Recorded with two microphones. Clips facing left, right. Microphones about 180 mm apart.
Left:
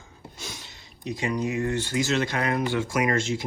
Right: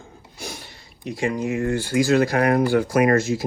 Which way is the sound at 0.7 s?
20° left (ahead or behind).